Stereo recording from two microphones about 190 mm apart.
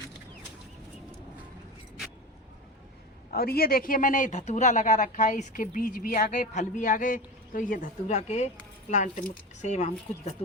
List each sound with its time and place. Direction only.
3.3 s speech: 55° left (ahead or behind); by 9.9 s 35° left (ahead or behind)